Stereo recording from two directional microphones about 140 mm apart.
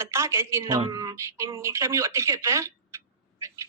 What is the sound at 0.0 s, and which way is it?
Speech, 20° right (ahead or behind).